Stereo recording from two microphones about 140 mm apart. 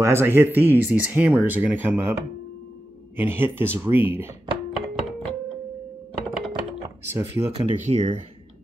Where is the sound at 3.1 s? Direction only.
15° right (ahead or behind).